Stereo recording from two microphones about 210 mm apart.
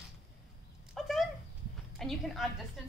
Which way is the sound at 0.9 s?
Centre (ahead or behind).